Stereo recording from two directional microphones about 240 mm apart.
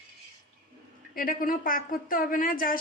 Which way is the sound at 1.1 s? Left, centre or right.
Left.